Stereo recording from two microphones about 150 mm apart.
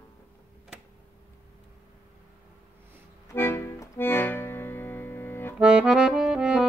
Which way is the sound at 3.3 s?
15° left (ahead or behind).